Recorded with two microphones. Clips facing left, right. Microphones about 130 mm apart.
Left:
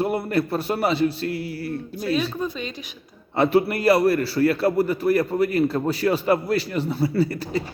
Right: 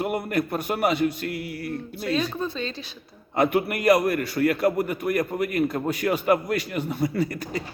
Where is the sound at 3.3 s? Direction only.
30° left (ahead or behind).